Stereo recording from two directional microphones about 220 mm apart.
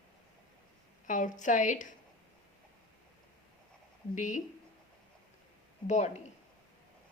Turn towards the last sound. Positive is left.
turn(degrees=30)  # may be behind; listen again after turning